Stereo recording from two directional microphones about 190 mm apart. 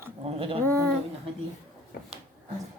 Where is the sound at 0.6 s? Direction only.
15° right (ahead or behind).